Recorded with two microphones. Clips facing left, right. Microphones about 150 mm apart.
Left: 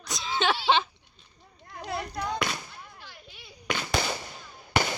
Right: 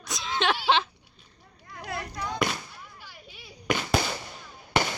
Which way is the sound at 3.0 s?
5° right (ahead or behind).